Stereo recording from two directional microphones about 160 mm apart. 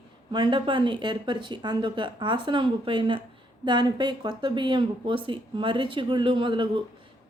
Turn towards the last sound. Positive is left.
turn(degrees=-30)  # may be behind; listen again after turning